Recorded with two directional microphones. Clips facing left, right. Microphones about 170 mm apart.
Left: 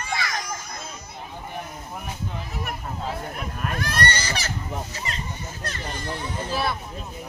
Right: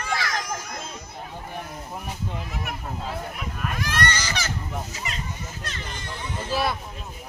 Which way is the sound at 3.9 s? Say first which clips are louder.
Even; 30° left (ahead or behind).